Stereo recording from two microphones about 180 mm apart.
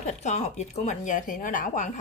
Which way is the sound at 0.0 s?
40° left (ahead or behind).